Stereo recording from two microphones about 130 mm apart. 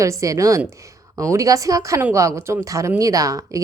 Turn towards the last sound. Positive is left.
turn(degrees=-25)  # may be behind; listen again after turning